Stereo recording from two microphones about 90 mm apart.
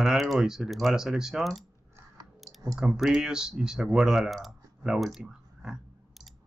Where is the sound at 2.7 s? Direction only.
5° right (ahead or behind).